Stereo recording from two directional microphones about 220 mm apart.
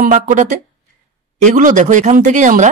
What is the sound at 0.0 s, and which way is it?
Speech, 35° right (ahead or behind).